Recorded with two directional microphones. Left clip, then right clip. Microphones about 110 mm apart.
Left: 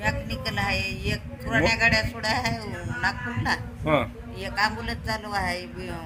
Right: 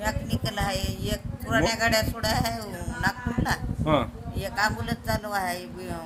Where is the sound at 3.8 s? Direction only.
5° right (ahead or behind).